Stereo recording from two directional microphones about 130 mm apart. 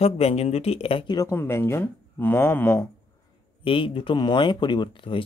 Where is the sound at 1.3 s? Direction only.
20° left (ahead or behind).